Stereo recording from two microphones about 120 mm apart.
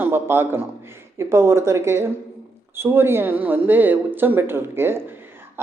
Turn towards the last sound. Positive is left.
turn(degrees=-20)  # may be behind; listen again after turning